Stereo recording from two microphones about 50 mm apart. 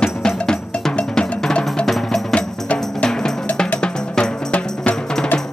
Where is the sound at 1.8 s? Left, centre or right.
Centre.